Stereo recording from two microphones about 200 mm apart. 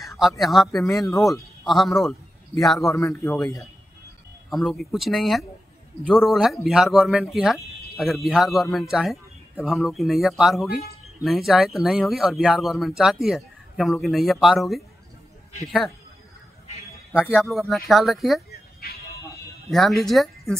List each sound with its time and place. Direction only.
0.4 s a man's voice: centre (ahead or behind)
2.8 s a man's voice: 15° left (ahead or behind)
4.5 s speech: centre (ahead or behind)
10.7 s speech: 50° left (ahead or behind)
11.2 s speech: centre (ahead or behind)
17.1 s speech: 10° left (ahead or behind)
18.5 s music: 50° left (ahead or behind)
19.7 s speech: centre (ahead or behind)